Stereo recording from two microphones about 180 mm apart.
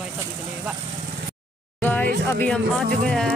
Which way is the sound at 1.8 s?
10° left (ahead or behind).